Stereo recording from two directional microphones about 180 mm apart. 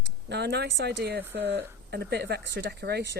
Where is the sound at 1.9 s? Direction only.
65° right (ahead or behind).